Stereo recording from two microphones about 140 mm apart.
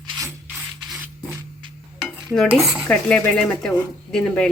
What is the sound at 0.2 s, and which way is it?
Rub, 15° right (ahead or behind).